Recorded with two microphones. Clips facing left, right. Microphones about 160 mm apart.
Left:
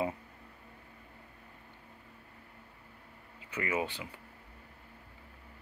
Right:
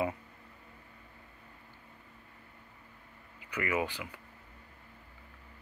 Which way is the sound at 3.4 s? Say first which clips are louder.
Right 1 dB; 25° left (ahead or behind).